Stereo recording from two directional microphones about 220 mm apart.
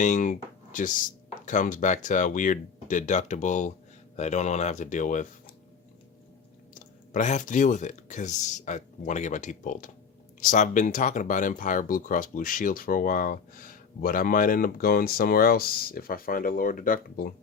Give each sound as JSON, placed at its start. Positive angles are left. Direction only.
{"t": 0.0, "sound": "speech", "side_deg": 35}
{"t": 6.7, "sound": "speech", "side_deg": 35}